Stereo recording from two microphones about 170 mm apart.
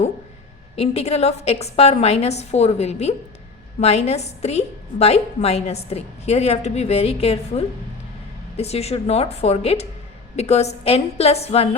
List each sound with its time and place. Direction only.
0.8 s a woman's voice: 40° left (ahead or behind)